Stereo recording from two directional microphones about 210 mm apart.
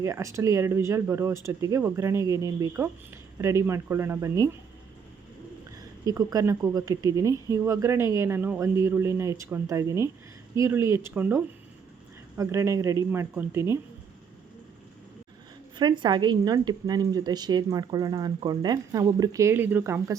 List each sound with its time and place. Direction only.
0.0 s speech: 15° right (ahead or behind)
6.1 s speech: 15° right (ahead or behind)
15.8 s speech: 20° right (ahead or behind)